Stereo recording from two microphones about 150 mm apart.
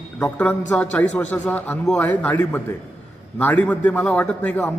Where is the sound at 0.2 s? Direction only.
10° left (ahead or behind).